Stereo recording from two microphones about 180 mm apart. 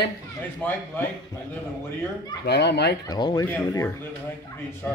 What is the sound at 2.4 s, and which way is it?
Speech, 70° left (ahead or behind).